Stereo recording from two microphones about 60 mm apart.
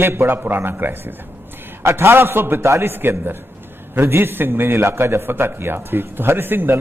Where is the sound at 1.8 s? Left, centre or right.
Right.